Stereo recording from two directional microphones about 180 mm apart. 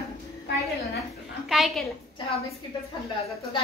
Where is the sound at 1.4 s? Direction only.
Centre (ahead or behind).